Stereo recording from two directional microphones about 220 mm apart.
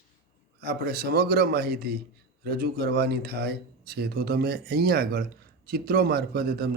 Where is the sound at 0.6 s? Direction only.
45° right (ahead or behind).